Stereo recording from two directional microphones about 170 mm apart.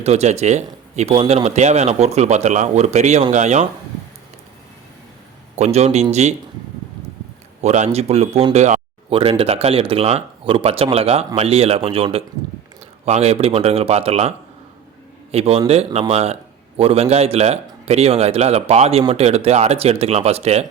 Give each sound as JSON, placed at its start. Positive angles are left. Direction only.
{"t": 0.0, "sound": "a man's voice", "side_deg": -40}
{"t": 5.5, "sound": "a man's voice", "side_deg": -40}
{"t": 7.6, "sound": "a man's voice", "side_deg": -45}